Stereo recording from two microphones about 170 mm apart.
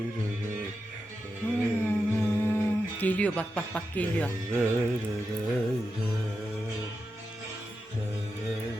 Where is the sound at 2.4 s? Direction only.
10° left (ahead or behind).